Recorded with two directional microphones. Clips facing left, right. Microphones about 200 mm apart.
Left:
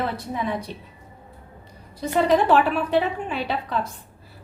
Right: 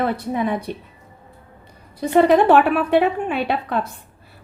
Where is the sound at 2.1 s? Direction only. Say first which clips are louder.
Right 5 dB; 60° right (ahead or behind).